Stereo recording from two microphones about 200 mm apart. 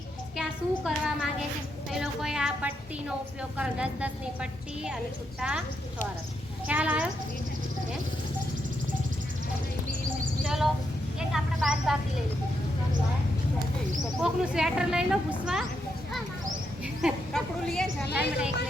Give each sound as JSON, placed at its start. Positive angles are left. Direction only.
{"t": 0.9, "sound": "speech", "side_deg": 0}
{"t": 6.7, "sound": "speech", "side_deg": -5}
{"t": 10.4, "sound": "a sound", "side_deg": 0}
{"t": 14.2, "sound": "speech", "side_deg": -5}
{"t": 16.8, "sound": "speech", "side_deg": 0}
{"t": 18.0, "sound": "a woman's voice", "side_deg": 55}